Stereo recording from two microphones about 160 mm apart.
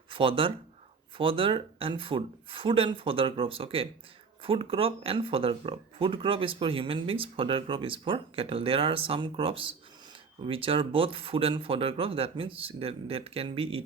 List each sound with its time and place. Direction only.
0.1 s speech: 35° right (ahead or behind)